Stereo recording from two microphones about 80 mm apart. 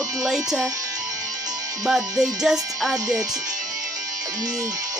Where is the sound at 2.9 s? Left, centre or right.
Right.